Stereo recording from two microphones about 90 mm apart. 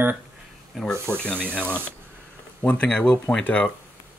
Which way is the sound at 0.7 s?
5° left (ahead or behind).